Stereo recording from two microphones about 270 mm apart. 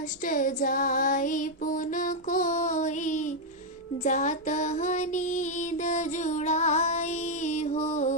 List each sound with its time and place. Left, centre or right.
0.3 s female singing: left